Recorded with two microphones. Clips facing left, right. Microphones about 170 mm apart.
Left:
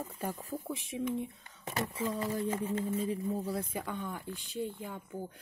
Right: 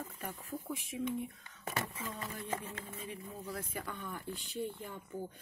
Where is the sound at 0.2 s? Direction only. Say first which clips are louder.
Left 7 dB; 35° left (ahead or behind).